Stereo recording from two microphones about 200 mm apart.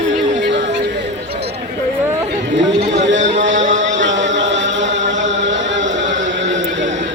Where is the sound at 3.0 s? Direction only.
65° right (ahead or behind).